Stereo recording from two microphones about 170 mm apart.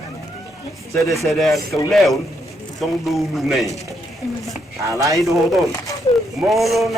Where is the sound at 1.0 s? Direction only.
Centre (ahead or behind).